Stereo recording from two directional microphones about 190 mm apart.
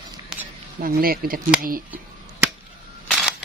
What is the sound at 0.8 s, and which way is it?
Speech, 50° right (ahead or behind).